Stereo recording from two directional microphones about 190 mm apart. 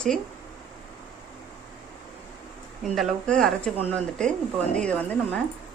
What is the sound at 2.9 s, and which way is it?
A woman's voice, centre (ahead or behind).